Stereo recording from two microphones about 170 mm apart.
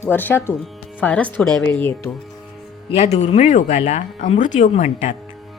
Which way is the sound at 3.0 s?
40° left (ahead or behind).